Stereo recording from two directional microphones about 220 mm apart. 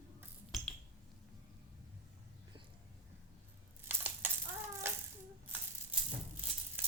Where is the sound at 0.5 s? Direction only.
Centre (ahead or behind).